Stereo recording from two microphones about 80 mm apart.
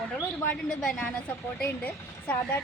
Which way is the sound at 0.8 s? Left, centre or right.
Centre.